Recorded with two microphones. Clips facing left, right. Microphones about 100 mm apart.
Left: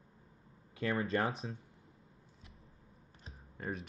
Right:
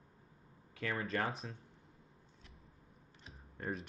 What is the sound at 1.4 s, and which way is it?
Speech, 20° left (ahead or behind).